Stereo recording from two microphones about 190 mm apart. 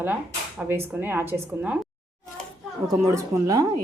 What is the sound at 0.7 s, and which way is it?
A woman's voice, 10° right (ahead or behind).